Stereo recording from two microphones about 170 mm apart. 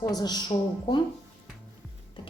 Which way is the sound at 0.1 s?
25° left (ahead or behind).